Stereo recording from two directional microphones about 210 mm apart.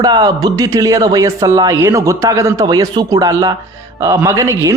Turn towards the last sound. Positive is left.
turn(degrees=-15)  # may be behind; listen again after turning